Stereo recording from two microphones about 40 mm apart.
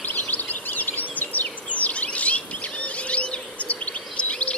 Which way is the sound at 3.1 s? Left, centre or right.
Left.